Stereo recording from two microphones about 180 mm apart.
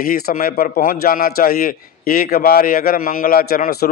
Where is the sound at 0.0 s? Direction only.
55° left (ahead or behind).